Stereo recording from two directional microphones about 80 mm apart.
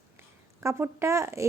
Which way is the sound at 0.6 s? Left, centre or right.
Right.